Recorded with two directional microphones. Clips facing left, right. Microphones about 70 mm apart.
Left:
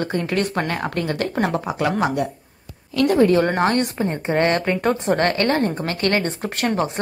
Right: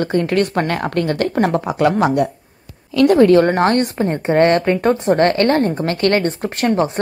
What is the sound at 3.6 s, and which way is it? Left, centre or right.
A woman's voice, right.